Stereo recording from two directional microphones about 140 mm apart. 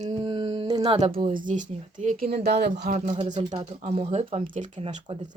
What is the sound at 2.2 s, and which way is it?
Speech, 45° right (ahead or behind).